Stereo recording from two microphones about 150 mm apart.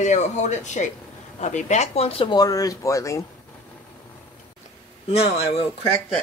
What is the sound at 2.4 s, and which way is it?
Speech, 25° left (ahead or behind).